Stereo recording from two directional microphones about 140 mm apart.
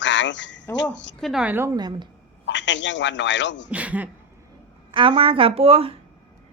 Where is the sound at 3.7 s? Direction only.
10° right (ahead or behind).